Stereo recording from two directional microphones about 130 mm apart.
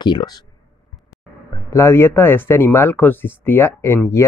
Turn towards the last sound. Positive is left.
turn(degrees=20)  # may be behind; listen again after turning